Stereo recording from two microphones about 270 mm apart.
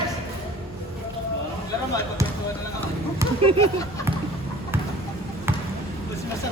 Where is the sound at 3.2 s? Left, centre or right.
Centre.